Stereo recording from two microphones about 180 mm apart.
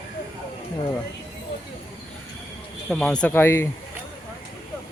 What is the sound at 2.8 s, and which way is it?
Speech, 5° left (ahead or behind).